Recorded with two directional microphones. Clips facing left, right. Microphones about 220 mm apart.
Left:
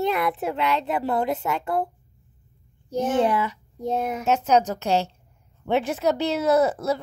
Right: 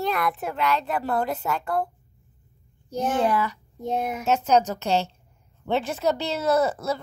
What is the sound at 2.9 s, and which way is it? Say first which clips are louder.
A child's voice: left 2 dB; 25° left (ahead or behind).